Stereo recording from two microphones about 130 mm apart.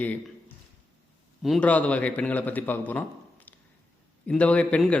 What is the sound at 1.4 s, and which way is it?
Speech, centre (ahead or behind).